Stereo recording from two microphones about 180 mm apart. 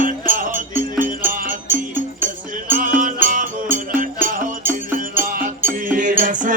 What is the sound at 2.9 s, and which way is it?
Music, 50° right (ahead or behind).